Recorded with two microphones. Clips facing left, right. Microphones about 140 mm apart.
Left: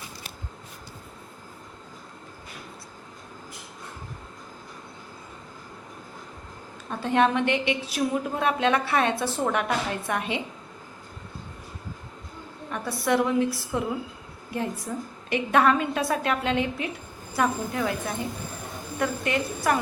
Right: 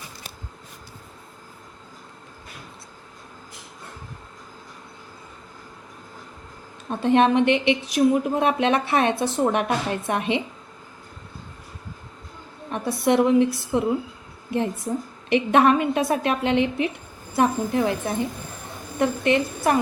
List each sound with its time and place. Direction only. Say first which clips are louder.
6.9 s a woman's voice: right 5 dB; 20° right (ahead or behind)
12.7 s a woman's voice: right 4 dB; 20° right (ahead or behind)
14.9 s a woman's voice: right 6 dB; 30° right (ahead or behind)